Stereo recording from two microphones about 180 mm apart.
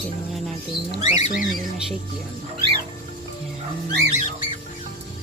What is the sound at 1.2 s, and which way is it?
Speech, 45° left (ahead or behind).